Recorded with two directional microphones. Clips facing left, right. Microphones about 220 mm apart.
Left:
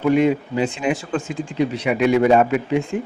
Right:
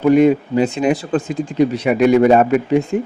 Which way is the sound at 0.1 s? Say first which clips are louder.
Right 5 dB; 45° right (ahead or behind).